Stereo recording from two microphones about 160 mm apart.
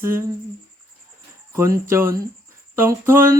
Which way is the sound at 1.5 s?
15° right (ahead or behind).